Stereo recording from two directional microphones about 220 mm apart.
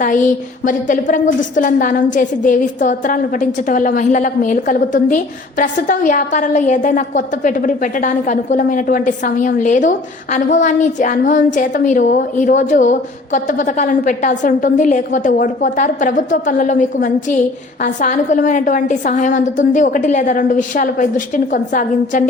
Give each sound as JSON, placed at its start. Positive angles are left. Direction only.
{"t": 0.6, "sound": "a woman's voice", "side_deg": 35}